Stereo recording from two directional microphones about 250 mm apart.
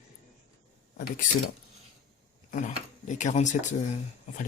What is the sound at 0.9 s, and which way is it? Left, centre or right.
Mechanisms, left.